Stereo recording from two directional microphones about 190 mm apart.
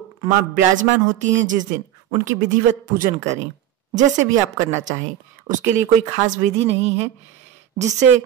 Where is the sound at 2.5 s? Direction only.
45° right (ahead or behind).